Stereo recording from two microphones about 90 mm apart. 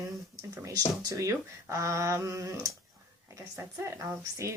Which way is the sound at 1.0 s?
35° right (ahead or behind).